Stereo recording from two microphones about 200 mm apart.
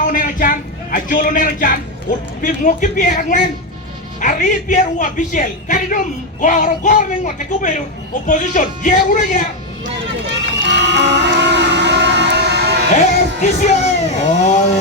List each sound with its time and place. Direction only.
0.0 s a man's voice: 40° left (ahead or behind)
10.2 s a sound: 60° right (ahead or behind)
12.9 s a man's voice: 35° left (ahead or behind)